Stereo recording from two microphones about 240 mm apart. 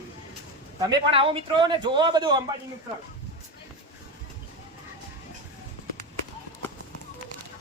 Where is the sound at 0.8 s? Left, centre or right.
Centre.